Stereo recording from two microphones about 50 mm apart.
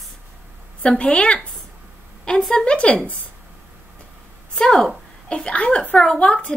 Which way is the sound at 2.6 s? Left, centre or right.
Left.